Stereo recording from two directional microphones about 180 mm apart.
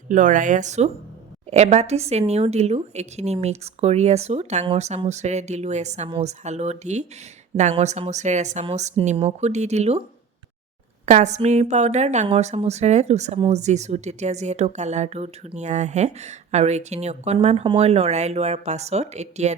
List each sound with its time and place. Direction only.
0.1 s a woman's voice: 45° right (ahead or behind)
11.0 s a woman's voice: 40° right (ahead or behind)